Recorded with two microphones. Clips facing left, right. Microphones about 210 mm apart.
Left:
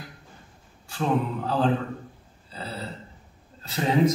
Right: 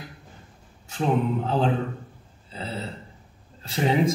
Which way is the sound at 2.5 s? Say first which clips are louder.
Right 3 dB; 25° right (ahead or behind).